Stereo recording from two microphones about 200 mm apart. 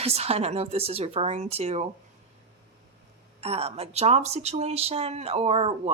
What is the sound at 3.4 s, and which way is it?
A woman's voice, 30° right (ahead or behind).